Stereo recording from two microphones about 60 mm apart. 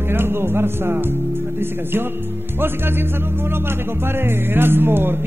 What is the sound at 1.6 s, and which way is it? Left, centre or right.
Music, right.